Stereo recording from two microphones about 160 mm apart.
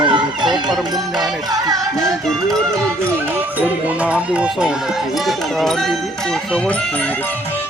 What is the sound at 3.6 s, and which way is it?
Speech, 10° right (ahead or behind).